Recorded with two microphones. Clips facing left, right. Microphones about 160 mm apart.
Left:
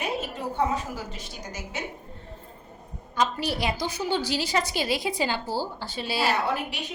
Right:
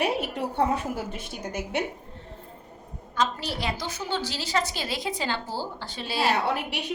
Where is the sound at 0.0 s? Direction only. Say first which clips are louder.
Right 3 dB; 65° right (ahead or behind).